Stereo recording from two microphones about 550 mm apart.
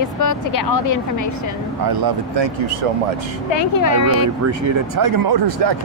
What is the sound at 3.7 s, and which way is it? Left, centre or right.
Speech, left.